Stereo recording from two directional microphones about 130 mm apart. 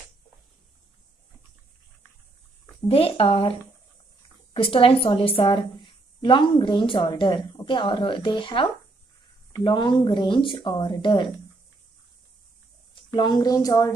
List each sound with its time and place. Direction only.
2.9 s speech: 45° left (ahead or behind)
4.6 s a woman's voice: 45° left (ahead or behind)
12.9 s a woman's voice: 35° left (ahead or behind)